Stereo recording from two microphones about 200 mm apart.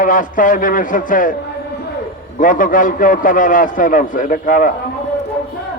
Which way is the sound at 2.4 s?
40° left (ahead or behind).